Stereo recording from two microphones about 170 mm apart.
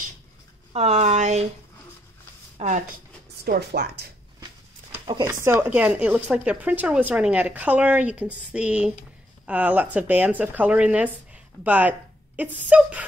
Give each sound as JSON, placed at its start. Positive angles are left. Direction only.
{"t": 0.7, "sound": "speech", "side_deg": -40}
{"t": 2.5, "sound": "speech", "side_deg": -45}
{"t": 3.4, "sound": "speech", "side_deg": -70}
{"t": 5.2, "sound": "speech", "side_deg": -15}